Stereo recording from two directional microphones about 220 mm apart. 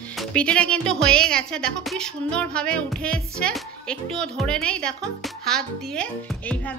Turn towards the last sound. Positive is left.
turn(degrees=5)  # may be behind; listen again after turning